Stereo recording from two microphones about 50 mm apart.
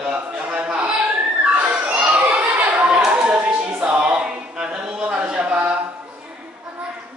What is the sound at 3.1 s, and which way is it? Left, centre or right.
A capella, right.